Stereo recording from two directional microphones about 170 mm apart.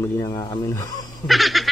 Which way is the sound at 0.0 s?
20° left (ahead or behind).